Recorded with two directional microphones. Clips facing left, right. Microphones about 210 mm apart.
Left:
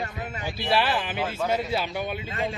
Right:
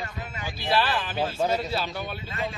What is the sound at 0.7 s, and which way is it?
A man's voice, 15° left (ahead or behind).